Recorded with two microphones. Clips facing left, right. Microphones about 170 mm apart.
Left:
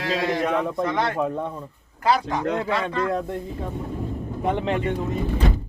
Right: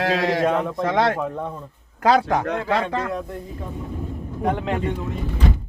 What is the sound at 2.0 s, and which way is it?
Speech, 80° right.